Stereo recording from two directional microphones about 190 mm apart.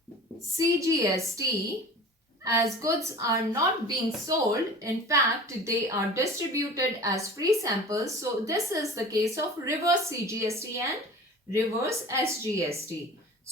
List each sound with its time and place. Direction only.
0.5 s a woman's voice: 15° right (ahead or behind)